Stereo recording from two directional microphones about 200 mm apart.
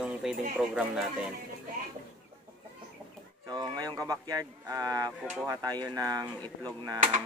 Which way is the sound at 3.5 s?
20° right (ahead or behind).